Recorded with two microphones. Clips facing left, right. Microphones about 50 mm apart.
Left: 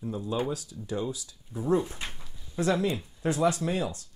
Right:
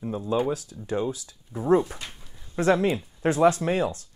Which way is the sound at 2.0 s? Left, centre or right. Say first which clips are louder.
Left 1 dB; left.